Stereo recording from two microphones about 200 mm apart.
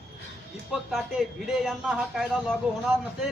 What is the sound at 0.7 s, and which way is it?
A man's voice, centre (ahead or behind).